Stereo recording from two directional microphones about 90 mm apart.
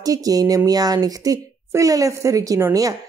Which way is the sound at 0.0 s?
40° right (ahead or behind).